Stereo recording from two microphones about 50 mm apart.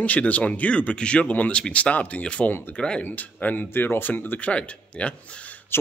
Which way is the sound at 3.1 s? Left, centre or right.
Left.